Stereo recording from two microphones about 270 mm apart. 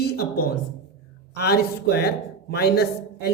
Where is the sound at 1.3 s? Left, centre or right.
Left.